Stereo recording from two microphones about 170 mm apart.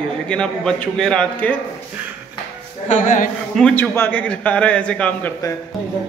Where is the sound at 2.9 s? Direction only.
50° left (ahead or behind).